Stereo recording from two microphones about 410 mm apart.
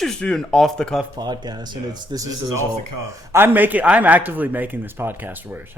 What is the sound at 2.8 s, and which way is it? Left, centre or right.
Speech, right.